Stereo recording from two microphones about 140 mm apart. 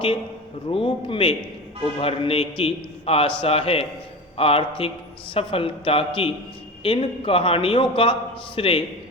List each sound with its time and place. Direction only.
0.7 s a man's voice: 40° left (ahead or behind)